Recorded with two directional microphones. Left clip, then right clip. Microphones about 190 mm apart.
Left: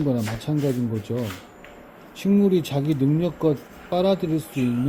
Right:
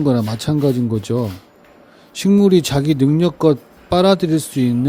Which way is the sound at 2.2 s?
50° right (ahead or behind).